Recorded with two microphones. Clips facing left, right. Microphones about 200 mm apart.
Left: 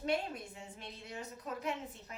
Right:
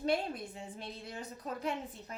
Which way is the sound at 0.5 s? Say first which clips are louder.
Right 4 dB; 35° right (ahead or behind).